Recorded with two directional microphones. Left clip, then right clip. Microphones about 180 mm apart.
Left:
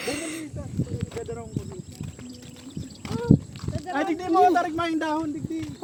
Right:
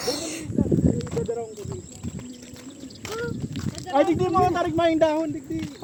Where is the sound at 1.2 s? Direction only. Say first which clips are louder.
Right 4 dB; 10° right (ahead or behind).